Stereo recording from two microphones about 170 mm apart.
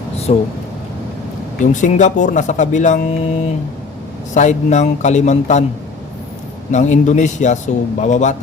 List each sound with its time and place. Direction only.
0.3 s speech: 40° left (ahead or behind)
1.6 s speech: 45° left (ahead or behind)
6.7 s speech: 45° left (ahead or behind)